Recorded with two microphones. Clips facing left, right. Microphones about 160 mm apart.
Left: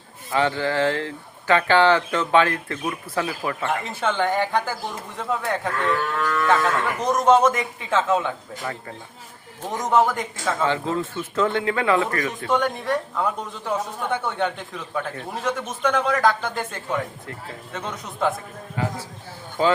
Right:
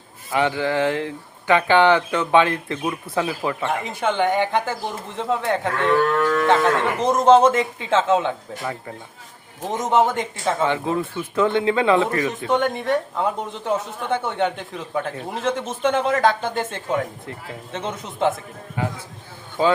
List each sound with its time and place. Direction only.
0.3 s speech: 15° right (ahead or behind)
9.6 s speech: 20° right (ahead or behind)